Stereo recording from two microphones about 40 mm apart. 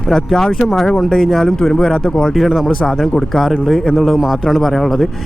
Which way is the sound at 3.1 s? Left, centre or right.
Centre.